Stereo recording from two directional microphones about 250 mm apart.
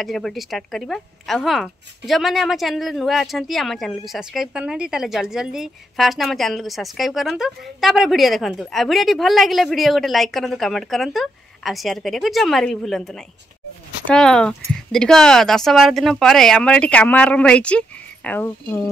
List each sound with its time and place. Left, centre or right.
0.0 s speech: centre